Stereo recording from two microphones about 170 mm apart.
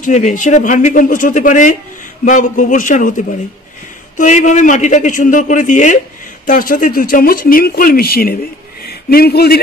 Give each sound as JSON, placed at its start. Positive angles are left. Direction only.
{"t": 0.0, "sound": "speech", "side_deg": 45}
{"t": 4.2, "sound": "speech", "side_deg": 45}